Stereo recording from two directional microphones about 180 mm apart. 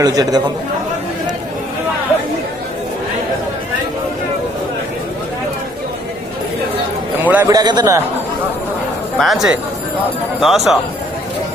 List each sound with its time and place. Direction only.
0.0 s a man's voice: 20° right (ahead or behind)
7.3 s a man's voice: 10° right (ahead or behind)
7.5 s a man's voice: 20° right (ahead or behind)
9.1 s speech: centre (ahead or behind)